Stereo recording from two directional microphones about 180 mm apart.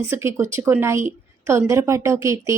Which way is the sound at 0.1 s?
15° right (ahead or behind).